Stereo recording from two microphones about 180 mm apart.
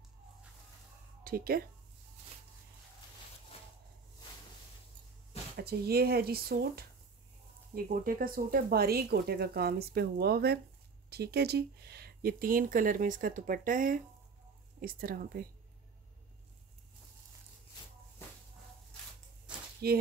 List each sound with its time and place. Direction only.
1.2 s speech: 55° right (ahead or behind)
5.6 s speech: 60° right (ahead or behind)
19.8 s speech: 60° right (ahead or behind)